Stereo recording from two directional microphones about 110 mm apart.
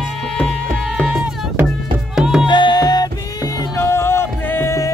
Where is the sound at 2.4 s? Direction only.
45° left (ahead or behind); by 4.9 s 25° left (ahead or behind).